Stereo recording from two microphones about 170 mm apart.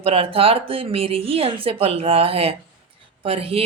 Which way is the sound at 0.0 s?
35° right (ahead or behind).